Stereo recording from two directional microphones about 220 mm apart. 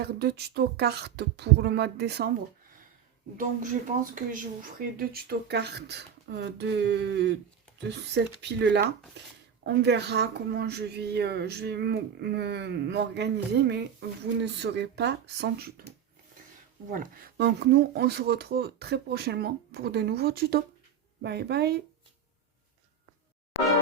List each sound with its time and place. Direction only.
0.0 s speech: 45° right (ahead or behind)
3.3 s speech: 35° right (ahead or behind)
16.9 s speech: 40° right (ahead or behind)